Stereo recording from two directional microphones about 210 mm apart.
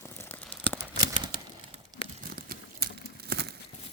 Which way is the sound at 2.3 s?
45° right (ahead or behind).